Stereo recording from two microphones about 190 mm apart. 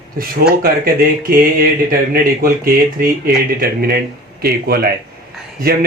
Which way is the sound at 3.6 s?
50° right (ahead or behind).